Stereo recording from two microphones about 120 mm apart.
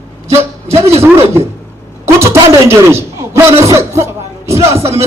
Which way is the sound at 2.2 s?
25° right (ahead or behind).